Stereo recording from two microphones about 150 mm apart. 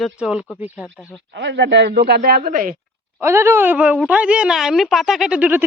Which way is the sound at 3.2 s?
20° right (ahead or behind).